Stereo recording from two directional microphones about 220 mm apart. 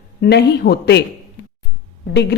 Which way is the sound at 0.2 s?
50° left (ahead or behind).